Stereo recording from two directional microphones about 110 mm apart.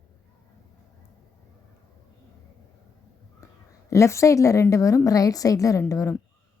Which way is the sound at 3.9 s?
25° left (ahead or behind).